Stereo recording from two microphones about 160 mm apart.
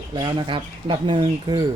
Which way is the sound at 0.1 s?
30° right (ahead or behind).